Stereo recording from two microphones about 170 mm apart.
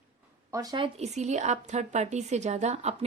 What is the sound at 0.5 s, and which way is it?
Speech, 20° right (ahead or behind).